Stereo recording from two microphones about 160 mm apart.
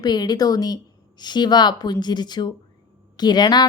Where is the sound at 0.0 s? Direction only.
25° left (ahead or behind).